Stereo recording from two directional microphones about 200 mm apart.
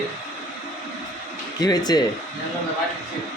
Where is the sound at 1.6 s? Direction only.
20° left (ahead or behind).